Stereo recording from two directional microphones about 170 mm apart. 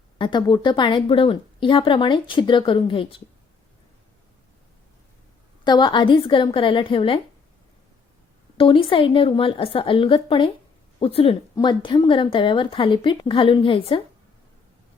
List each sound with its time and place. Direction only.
0.2 s a woman's voice: 25° left (ahead or behind)
5.6 s a woman's voice: 25° left (ahead or behind)
8.5 s a woman's voice: 30° left (ahead or behind)